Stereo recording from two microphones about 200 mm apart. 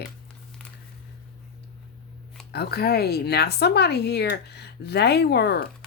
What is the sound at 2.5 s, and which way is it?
Speech, 50° left (ahead or behind).